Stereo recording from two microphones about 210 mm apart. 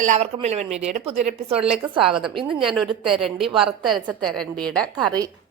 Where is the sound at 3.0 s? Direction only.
Centre (ahead or behind).